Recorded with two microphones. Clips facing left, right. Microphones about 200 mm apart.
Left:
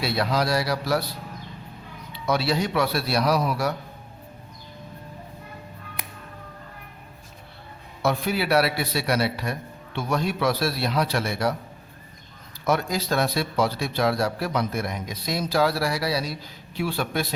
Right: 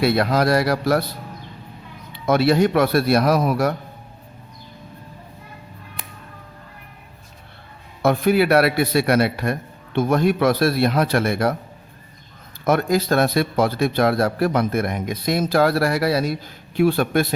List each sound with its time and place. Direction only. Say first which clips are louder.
0.0 s speech: right 6 dB; 55° right (ahead or behind)
2.1 s speech: right 7 dB; 55° right (ahead or behind)
8.0 s speech: right 8 dB; 55° right (ahead or behind)
12.6 s speech: right 6 dB; 55° right (ahead or behind)